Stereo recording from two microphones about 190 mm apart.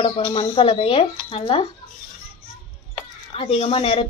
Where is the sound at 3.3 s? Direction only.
30° left (ahead or behind).